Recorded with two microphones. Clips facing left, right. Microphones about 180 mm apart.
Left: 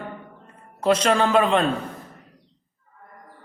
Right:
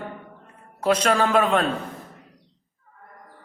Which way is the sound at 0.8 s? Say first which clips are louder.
Left 1 dB; 5° right (ahead or behind).